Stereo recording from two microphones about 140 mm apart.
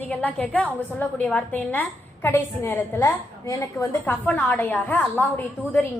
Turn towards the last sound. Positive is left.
turn(degrees=15)  # may be behind; listen again after turning